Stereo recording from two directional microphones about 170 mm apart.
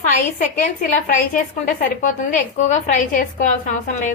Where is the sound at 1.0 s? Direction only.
50° left (ahead or behind).